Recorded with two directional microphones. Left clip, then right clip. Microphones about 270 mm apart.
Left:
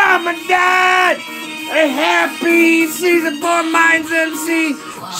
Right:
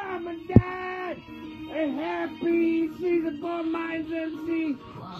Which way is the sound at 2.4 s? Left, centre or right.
Left.